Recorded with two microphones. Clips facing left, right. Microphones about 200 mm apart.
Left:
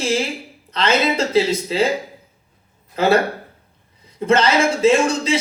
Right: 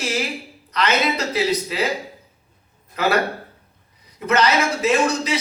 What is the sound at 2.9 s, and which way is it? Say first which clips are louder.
A man's voice: left 4 dB; 25° left (ahead or behind).